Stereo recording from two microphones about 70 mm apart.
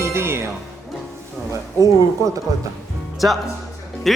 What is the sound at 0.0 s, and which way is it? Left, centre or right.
Music, right.